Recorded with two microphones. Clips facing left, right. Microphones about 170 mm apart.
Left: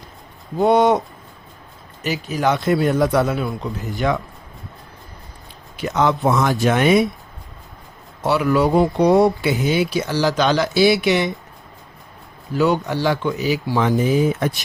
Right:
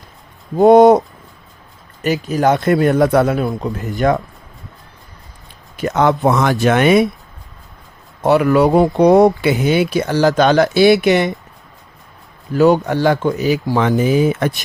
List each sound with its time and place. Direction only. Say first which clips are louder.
0.6 s a man's voice: right 7 dB; 40° right (ahead or behind)
2.2 s a man's voice: right 4 dB; 40° right (ahead or behind)
5.7 s speech: right 4 dB; 50° right (ahead or behind)
6.2 s speech: right 3 dB; 70° right (ahead or behind)
8.2 s a man's voice: right 5 dB; 45° right (ahead or behind)
9.6 s speech: right 3 dB; 60° right (ahead or behind)
10.7 s speech: right 5 dB; centre (ahead or behind)
12.5 s a man's voice: right 6 dB; 40° right (ahead or behind)
13.3 s speech: right 4 dB; centre (ahead or behind)
13.7 s speech: right 2 dB; 75° right (ahead or behind)